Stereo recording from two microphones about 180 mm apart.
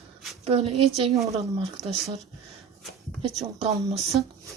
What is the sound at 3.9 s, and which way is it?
Speech, centre (ahead or behind).